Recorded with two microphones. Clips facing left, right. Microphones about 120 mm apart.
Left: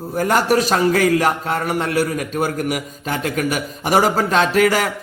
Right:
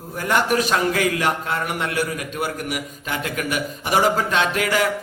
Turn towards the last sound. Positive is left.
turn(degrees=40)  # may be behind; listen again after turning